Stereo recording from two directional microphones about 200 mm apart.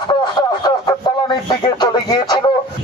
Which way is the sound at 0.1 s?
20° left (ahead or behind).